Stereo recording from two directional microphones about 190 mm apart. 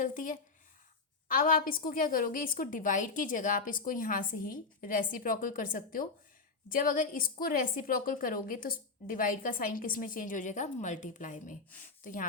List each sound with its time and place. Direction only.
0.0 s a woman's voice: 45° left (ahead or behind)